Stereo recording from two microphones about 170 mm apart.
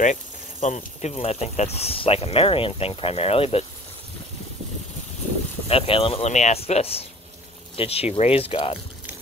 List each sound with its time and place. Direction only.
0.0 s speech: 45° left (ahead or behind)
5.7 s speech: 35° left (ahead or behind)